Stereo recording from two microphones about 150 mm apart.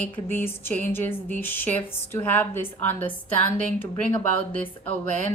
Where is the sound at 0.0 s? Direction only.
10° left (ahead or behind).